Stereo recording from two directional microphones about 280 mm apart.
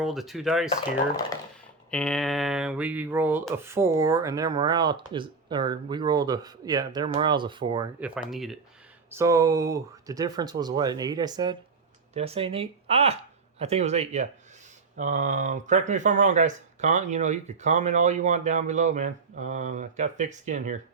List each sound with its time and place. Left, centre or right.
0.0 s speech: centre
1.9 s speech: centre
7.9 s speech: centre; by 20.7 s right